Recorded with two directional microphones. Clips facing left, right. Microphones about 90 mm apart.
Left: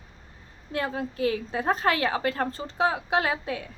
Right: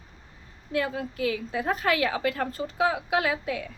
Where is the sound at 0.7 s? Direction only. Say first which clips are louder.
Right 1 dB; 35° left (ahead or behind).